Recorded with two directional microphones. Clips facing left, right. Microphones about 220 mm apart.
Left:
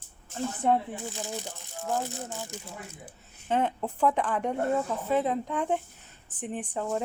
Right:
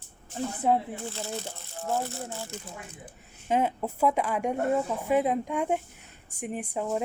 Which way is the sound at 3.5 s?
10° right (ahead or behind).